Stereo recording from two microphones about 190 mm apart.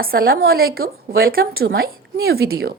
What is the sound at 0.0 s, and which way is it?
A woman's voice, 50° right (ahead or behind).